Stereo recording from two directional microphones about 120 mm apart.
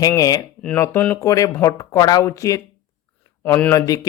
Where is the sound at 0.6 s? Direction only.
15° left (ahead or behind).